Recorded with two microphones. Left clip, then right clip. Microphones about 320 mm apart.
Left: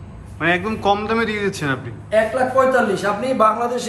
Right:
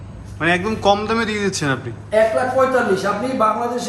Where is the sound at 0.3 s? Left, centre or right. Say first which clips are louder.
Right 1 dB; centre.